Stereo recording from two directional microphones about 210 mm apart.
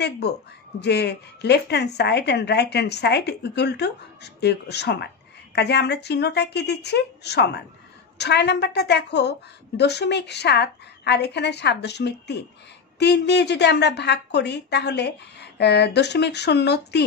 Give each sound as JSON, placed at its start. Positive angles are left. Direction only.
{"t": 0.7, "sound": "a woman's voice", "side_deg": 50}